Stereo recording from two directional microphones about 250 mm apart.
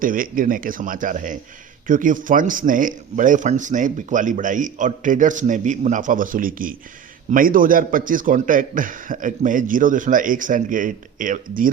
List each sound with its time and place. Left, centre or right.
0.0 s speech: right